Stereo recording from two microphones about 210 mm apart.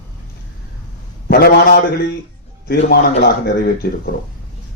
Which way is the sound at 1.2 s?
45° left (ahead or behind).